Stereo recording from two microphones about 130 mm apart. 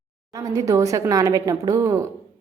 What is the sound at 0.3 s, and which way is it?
A woman's voice, 25° right (ahead or behind).